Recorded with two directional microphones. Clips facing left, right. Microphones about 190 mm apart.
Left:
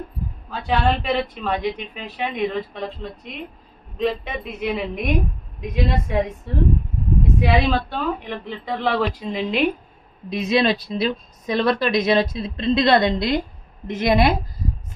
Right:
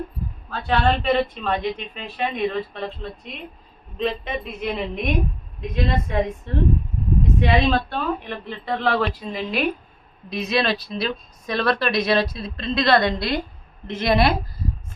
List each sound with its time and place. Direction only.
0.5 s a woman's voice: 10° left (ahead or behind)